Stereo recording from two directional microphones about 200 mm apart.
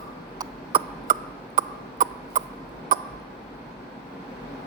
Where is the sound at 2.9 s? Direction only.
45° right (ahead or behind).